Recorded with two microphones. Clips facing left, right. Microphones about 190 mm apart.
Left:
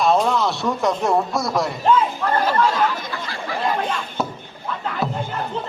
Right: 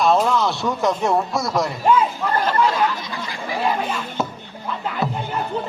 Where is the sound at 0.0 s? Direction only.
Centre (ahead or behind).